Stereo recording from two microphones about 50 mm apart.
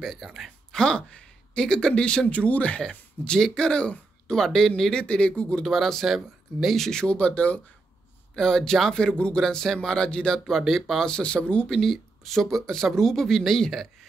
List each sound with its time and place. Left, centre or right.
0.0 s speech: centre
0.7 s speech: centre
4.4 s speech: centre
5.7 s speech: centre
6.8 s speech: centre
7.2 s speech: left
8.4 s speech: centre
10.4 s speech: centre
11.1 s speech: centre
11.7 s speech: centre